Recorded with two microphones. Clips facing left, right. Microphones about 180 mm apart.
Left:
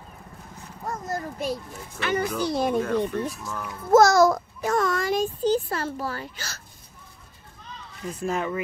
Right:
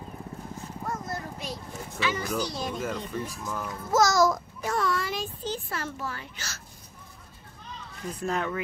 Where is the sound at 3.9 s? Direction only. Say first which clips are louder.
Left 6 dB; 55° left (ahead or behind); by 6.5 s 35° left (ahead or behind).